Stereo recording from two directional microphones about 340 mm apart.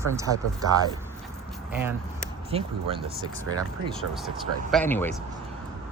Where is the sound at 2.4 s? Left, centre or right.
Centre.